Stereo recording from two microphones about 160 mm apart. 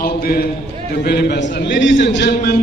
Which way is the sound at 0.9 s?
90° left.